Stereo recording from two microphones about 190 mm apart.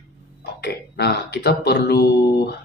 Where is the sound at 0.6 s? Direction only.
60° left (ahead or behind).